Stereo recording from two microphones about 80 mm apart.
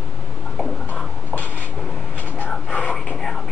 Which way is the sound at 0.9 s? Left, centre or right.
Centre.